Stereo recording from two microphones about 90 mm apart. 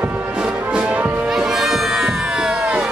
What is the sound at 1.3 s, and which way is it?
Music, 5° right (ahead or behind).